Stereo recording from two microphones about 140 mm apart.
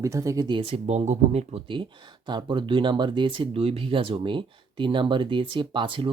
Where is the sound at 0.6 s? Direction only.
50° right (ahead or behind).